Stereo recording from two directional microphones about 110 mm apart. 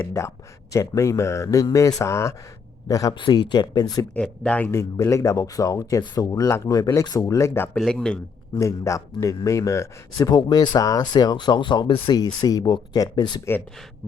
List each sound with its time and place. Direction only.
0.2 s a man's voice: 25° left (ahead or behind)
4.1 s speech: 10° left (ahead or behind)
4.7 s a man's voice: 25° left (ahead or behind)
7.8 s speech: 5° left (ahead or behind)
8.5 s a man's voice: 25° left (ahead or behind)